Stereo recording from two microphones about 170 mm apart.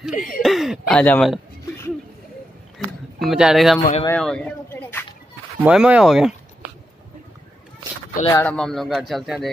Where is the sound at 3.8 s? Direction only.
40° left (ahead or behind).